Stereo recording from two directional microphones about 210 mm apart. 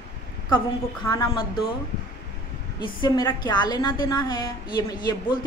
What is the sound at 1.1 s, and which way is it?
Speech, 20° left (ahead or behind).